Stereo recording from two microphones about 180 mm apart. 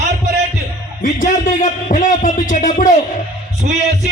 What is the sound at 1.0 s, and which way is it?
A man's voice, 45° left (ahead or behind).